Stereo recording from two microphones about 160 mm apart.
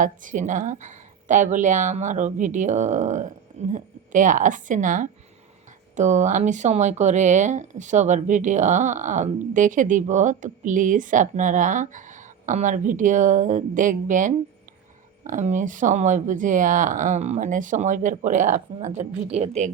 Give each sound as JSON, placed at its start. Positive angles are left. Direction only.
{"t": 0.0, "sound": "speech", "side_deg": -55}